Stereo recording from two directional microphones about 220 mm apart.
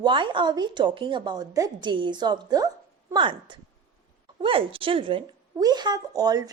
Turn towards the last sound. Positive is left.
turn(degrees=-15)  # may be behind; listen again after turning